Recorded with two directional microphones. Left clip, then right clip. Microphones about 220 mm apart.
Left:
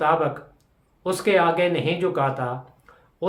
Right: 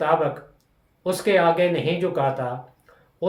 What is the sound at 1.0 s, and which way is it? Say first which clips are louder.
Speech: right 1 dB; 15° left (ahead or behind).